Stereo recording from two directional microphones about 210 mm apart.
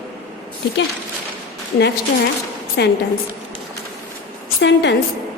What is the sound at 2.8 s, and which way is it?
Speech, 55° left (ahead or behind).